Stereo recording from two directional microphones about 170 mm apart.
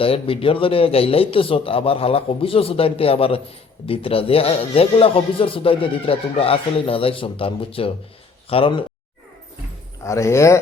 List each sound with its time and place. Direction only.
0.0 s speech: 35° left (ahead or behind)
10.0 s speech: 15° left (ahead or behind)